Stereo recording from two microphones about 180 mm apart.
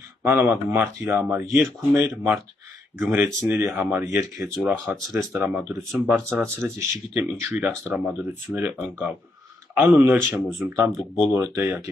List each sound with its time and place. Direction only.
0.2 s speech: 10° right (ahead or behind)
4.4 s speech: centre (ahead or behind)